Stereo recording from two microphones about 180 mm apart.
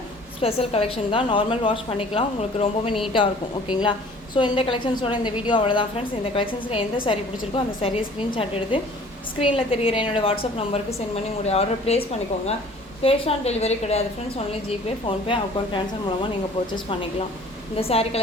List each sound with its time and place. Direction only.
0.4 s a woman's voice: 35° left (ahead or behind)
9.4 s a woman's voice: 30° left (ahead or behind)